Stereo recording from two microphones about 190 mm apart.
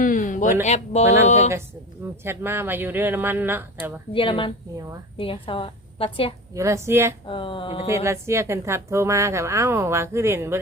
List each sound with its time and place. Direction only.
0.0 s a sound: 45° left (ahead or behind)
0.6 s speech: 35° left (ahead or behind)
2.2 s a woman's voice: 10° right (ahead or behind)
4.1 s a woman's voice: 25° left (ahead or behind)
6.5 s a woman's voice: 15° right (ahead or behind)
7.3 s a woman's voice: 25° left (ahead or behind)
7.9 s a woman's voice: 15° right (ahead or behind)